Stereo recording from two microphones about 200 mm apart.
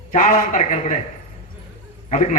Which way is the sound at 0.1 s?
40° left (ahead or behind).